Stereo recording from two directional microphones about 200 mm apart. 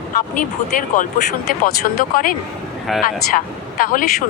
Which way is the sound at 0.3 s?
40° left (ahead or behind).